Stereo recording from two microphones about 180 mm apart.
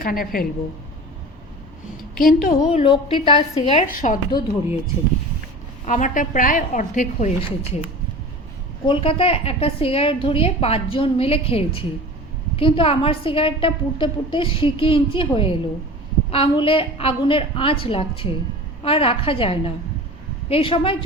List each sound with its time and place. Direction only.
0.0 s a woman's voice: 55° left (ahead or behind)
2.1 s a woman's voice: 55° left (ahead or behind)
2.6 s a woman's voice: 30° left (ahead or behind)
3.8 s a woman's voice: 50° left (ahead or behind)
5.8 s a woman's voice: 45° left (ahead or behind)
8.8 s a woman's voice: 30° left (ahead or behind)